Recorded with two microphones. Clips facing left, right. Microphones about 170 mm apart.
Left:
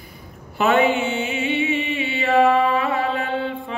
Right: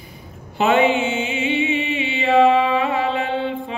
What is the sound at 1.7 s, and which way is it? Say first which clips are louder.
Chant: right 1 dB; 45° left (ahead or behind).